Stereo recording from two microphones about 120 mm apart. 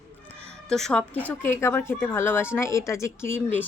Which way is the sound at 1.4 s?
20° left (ahead or behind).